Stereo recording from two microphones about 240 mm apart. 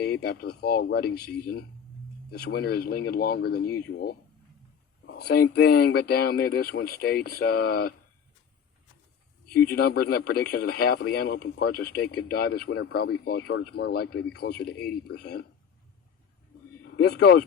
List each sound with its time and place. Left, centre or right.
0.0 s speech: left
9.5 s speech: left
16.8 s speech: left